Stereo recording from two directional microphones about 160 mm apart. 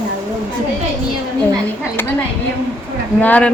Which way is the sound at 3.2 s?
10° left (ahead or behind).